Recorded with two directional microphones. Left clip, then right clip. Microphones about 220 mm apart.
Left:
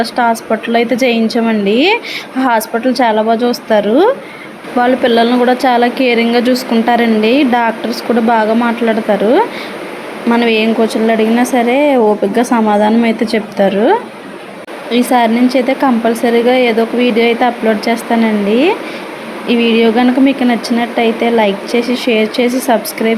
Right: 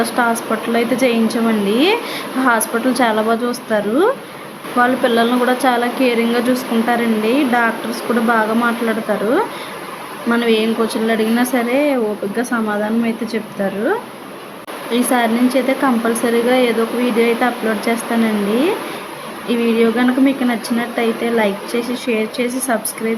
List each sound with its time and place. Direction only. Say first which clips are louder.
0.0 s speech: left 4 dB; 10° left (ahead or behind)
14.9 s speech: left 5 dB; 15° left (ahead or behind)
19.5 s speech: left 5 dB; 15° left (ahead or behind)